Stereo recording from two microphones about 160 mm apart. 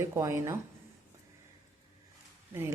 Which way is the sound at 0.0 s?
15° right (ahead or behind).